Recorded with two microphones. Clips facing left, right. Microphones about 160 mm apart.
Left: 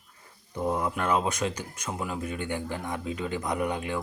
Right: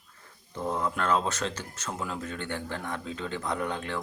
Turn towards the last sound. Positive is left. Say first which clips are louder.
# left 2 dB
turn(degrees=10)  # may be behind; listen again after turning